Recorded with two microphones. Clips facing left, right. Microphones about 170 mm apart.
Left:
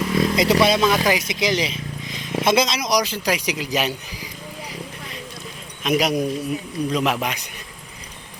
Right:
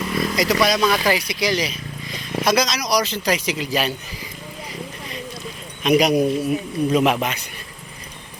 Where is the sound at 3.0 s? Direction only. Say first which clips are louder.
Right 1 dB; 10° left (ahead or behind).